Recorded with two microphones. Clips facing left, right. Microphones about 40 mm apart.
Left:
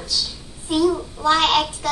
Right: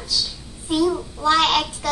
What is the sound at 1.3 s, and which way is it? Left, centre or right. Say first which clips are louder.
Speech: left 1 dB; left.